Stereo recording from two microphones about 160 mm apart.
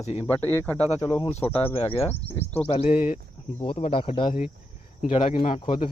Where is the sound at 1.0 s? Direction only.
30° left (ahead or behind).